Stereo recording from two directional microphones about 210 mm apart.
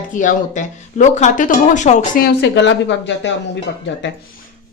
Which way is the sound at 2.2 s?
55° left (ahead or behind).